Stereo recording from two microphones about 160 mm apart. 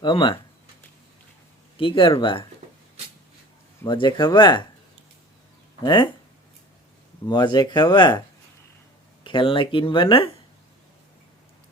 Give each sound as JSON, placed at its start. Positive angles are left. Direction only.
{"t": 0.0, "sound": "speech", "side_deg": 30}
{"t": 1.8, "sound": "speech", "side_deg": 35}
{"t": 3.8, "sound": "speech", "side_deg": 30}
{"t": 5.8, "sound": "speech", "side_deg": 30}
{"t": 7.3, "sound": "speech", "side_deg": 30}
{"t": 9.2, "sound": "speech", "side_deg": 30}